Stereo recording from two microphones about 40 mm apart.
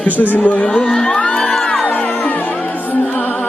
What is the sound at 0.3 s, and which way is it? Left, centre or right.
Speech, left.